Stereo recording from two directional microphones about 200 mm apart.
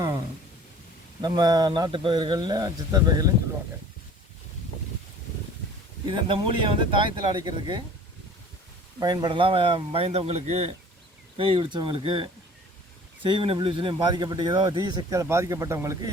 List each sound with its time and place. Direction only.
1.2 s speech: 20° right (ahead or behind)
6.1 s speech: 25° right (ahead or behind)
9.0 s speech: 20° right (ahead or behind)